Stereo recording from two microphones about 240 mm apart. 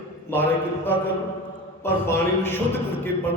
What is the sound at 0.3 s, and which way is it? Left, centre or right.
A man's voice, centre.